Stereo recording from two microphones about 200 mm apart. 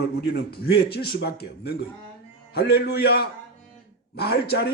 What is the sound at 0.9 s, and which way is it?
A man's voice, 55° left (ahead or behind).